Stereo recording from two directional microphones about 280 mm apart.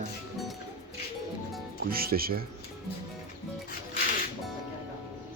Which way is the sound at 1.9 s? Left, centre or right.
Right.